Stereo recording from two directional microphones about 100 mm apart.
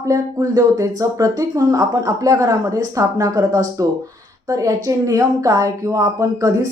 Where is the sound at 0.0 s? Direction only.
40° right (ahead or behind).